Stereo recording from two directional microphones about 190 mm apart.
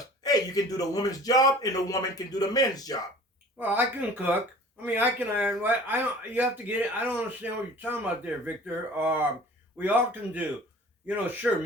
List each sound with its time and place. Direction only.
0.2 s speech: 20° left (ahead or behind)
3.6 s speech: 10° right (ahead or behind)